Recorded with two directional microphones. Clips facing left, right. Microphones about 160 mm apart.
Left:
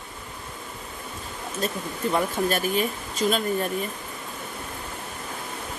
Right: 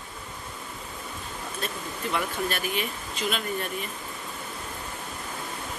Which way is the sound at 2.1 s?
40° left (ahead or behind).